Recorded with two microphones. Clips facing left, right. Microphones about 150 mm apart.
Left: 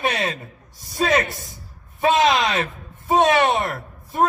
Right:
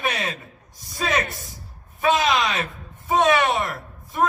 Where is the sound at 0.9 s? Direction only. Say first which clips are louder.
Left 5 dB; 40° left (ahead or behind).